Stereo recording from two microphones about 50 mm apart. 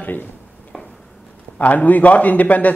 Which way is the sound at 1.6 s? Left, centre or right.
Left.